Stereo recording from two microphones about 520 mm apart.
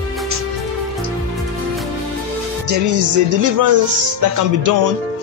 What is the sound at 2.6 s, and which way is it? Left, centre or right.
Music, right.